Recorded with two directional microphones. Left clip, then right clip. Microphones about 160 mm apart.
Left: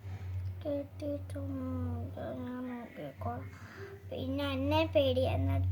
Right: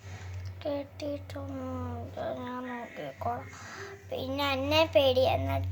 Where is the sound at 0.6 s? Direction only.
35° left (ahead or behind).